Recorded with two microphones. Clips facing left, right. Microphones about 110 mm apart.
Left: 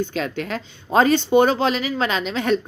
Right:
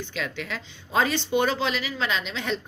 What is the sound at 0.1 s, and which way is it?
Speech, 45° left (ahead or behind).